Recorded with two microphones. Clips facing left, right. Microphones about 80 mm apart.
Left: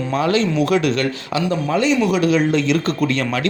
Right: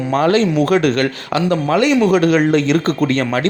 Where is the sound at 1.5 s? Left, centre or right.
Right.